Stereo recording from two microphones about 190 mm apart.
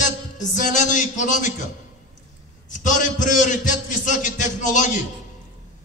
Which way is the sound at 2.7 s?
40° left (ahead or behind).